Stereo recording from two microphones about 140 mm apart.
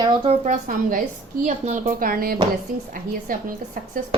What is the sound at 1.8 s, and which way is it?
A woman's voice, 85° right.